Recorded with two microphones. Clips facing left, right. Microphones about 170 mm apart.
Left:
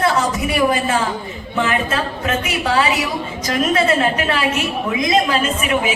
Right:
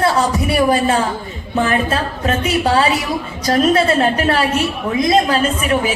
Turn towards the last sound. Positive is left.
turn(degrees=-40)  # may be behind; listen again after turning